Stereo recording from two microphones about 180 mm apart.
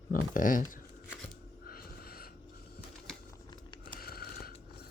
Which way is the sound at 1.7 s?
55° left (ahead or behind).